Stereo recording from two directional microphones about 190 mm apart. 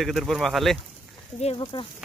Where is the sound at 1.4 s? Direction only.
30° left (ahead or behind).